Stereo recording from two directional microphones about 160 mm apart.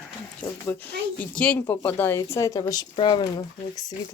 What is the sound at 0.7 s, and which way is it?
A woman's voice, 10° left (ahead or behind).